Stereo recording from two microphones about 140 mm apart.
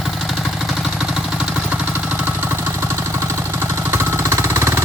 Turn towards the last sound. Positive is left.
turn(degrees=-15)  # may be behind; listen again after turning